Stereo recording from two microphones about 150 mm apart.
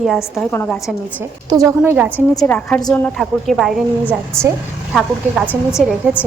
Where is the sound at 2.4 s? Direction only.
10° left (ahead or behind).